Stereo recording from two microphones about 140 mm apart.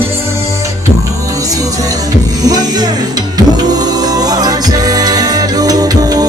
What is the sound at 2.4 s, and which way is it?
Music, 30° right (ahead or behind).